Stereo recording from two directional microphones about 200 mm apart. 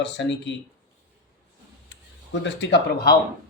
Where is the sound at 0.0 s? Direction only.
65° left (ahead or behind).